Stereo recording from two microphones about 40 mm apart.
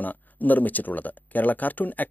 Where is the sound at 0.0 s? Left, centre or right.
Left.